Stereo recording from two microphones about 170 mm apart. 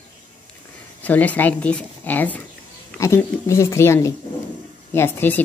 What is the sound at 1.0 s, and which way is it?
A woman's voice, 10° left (ahead or behind).